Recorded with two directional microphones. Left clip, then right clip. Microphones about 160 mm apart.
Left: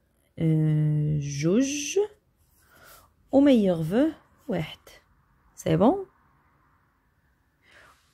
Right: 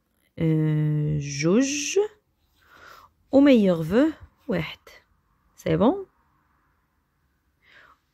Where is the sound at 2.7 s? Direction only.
20° right (ahead or behind).